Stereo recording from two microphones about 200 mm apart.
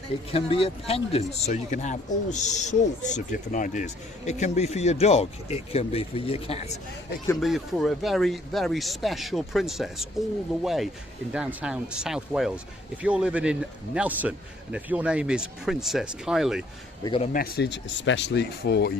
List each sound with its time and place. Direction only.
0.3 s speech: 30° left (ahead or behind)
7.3 s a man's voice: centre (ahead or behind)
17.0 s speech: 25° left (ahead or behind)
17.3 s speech: 50° left (ahead or behind)